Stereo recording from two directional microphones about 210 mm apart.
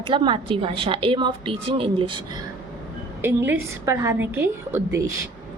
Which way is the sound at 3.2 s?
10° right (ahead or behind).